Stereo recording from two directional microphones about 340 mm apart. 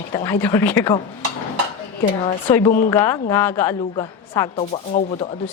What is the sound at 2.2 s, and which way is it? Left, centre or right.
A woman's voice, centre.